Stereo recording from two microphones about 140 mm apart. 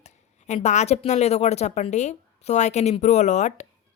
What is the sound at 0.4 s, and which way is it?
A woman's voice, 55° left (ahead or behind).